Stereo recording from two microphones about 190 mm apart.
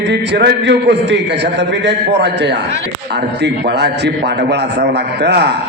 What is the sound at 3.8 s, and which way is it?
A man's voice, 60° right (ahead or behind).